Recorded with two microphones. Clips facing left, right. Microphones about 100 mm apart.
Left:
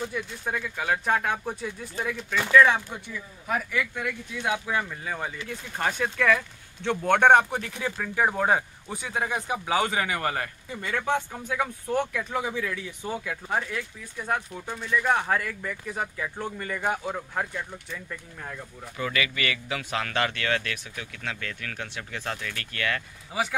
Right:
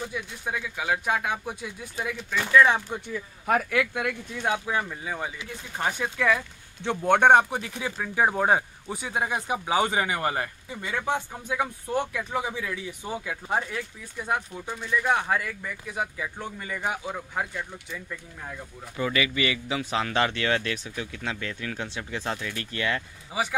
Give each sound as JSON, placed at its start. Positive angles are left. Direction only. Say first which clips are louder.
{"t": 0.0, "sound": "speech", "louder": "left 2 dB", "side_deg": -5}
{"t": 3.4, "sound": "speech", "louder": "right 4 dB", "side_deg": -60}
{"t": 4.6, "sound": "speech", "louder": "even", "side_deg": -15}
{"t": 13.6, "sound": "speech", "louder": "left 1 dB", "side_deg": -25}
{"t": 14.2, "sound": "speech", "louder": "even", "side_deg": -10}
{"t": 18.9, "sound": "speech", "louder": "right 3 dB", "side_deg": -25}
{"t": 23.3, "sound": "speech", "louder": "even", "side_deg": -10}